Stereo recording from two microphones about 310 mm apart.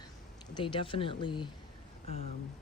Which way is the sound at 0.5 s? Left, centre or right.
Centre.